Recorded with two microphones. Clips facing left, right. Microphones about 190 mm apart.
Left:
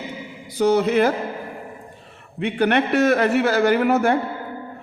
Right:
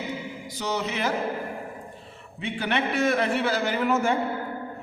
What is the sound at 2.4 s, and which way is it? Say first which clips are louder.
A man's voice: left 8 dB; 60° left (ahead or behind).